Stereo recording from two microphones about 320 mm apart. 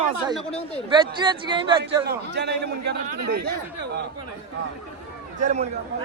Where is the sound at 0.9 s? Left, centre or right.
Centre.